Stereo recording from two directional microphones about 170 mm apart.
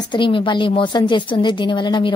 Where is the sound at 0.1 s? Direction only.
30° left (ahead or behind).